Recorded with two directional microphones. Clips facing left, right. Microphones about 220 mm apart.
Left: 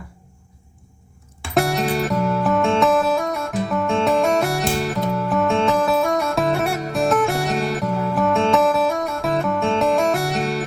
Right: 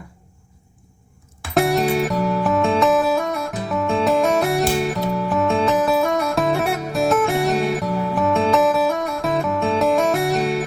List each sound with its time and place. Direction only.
1.4 s music: centre (ahead or behind)